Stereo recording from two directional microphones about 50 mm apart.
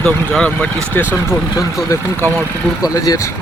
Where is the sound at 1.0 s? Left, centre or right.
Left.